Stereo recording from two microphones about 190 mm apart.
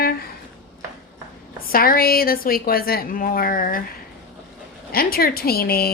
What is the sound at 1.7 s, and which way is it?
A woman's voice, 50° left (ahead or behind).